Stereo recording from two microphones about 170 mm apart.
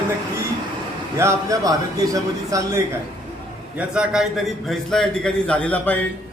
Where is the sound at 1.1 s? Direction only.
15° right (ahead or behind).